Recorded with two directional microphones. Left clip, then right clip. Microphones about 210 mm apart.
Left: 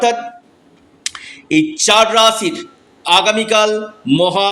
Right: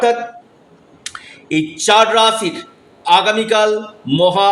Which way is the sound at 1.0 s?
15° left (ahead or behind).